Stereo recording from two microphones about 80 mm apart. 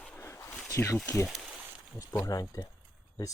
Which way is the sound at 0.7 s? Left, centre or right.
Left.